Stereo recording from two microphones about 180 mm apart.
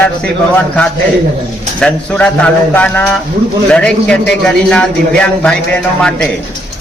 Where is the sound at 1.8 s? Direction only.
5° left (ahead or behind).